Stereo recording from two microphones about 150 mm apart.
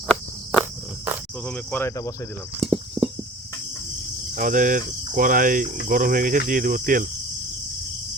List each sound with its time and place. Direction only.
0.6 s cricket: 15° right (ahead or behind)
1.5 s speech: 10° left (ahead or behind)
2.6 s a sound: 5° right (ahead or behind)
4.4 s speech: 60° right (ahead or behind)